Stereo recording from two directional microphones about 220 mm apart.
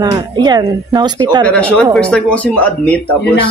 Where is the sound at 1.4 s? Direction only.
5° left (ahead or behind).